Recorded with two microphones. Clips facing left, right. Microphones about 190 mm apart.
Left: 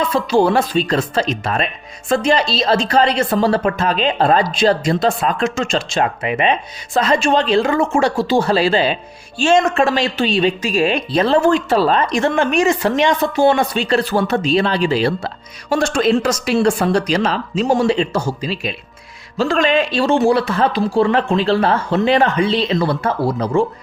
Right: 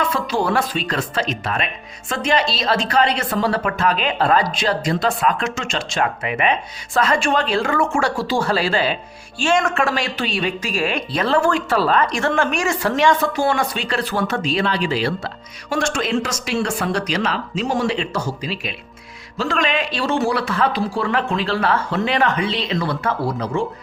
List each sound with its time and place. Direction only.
0.1 s speech: 25° left (ahead or behind)